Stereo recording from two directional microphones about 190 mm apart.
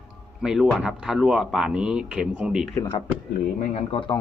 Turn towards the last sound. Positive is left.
turn(degrees=25)  # may be behind; listen again after turning